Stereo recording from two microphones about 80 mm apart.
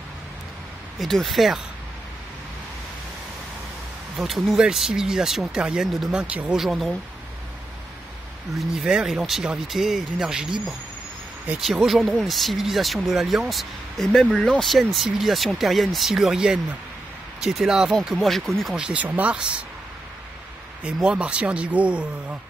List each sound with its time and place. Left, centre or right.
0.9 s speech: centre
4.2 s speech: centre
6.6 s speech: centre
8.5 s speech: centre
11.6 s speech: centre
18.8 s speech: centre
20.8 s speech: centre